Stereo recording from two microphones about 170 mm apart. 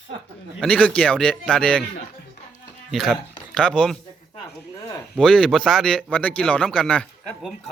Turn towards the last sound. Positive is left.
turn(degrees=5)  # may be behind; listen again after turning